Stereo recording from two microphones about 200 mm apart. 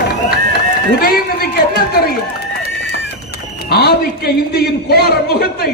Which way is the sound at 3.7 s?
50° left (ahead or behind).